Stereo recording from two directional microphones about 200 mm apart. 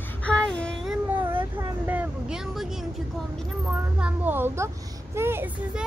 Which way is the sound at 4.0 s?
10° right (ahead or behind).